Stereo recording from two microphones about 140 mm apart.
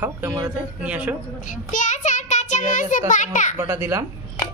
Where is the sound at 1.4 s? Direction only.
65° left (ahead or behind).